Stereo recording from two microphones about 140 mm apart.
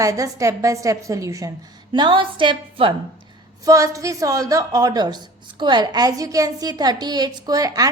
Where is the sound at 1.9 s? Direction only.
35° right (ahead or behind).